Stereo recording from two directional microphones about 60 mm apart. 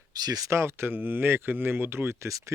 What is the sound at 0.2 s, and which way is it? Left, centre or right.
Speech, right.